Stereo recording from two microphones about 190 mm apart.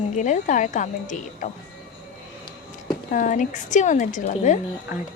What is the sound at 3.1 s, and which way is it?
Speech, 40° left (ahead or behind).